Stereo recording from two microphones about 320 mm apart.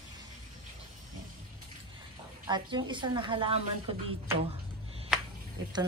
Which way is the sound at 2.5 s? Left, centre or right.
Centre.